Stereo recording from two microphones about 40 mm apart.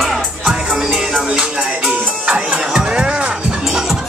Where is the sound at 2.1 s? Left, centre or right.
Right.